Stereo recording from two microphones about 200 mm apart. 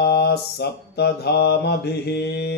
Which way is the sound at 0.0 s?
55° left (ahead or behind).